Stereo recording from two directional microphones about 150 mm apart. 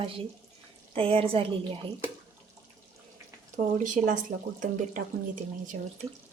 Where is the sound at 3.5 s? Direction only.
55° right (ahead or behind).